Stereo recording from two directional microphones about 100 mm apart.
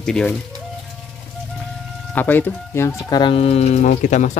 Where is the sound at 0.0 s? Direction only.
5° left (ahead or behind).